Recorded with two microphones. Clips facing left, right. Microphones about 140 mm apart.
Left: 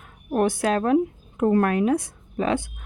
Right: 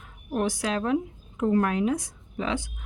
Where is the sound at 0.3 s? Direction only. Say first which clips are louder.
Left 6 dB; 55° left (ahead or behind).